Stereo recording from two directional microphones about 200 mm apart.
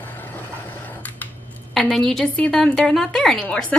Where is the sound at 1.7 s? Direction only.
Centre (ahead or behind).